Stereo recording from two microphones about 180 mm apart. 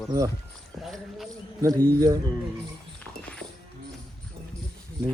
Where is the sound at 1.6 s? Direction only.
15° right (ahead or behind).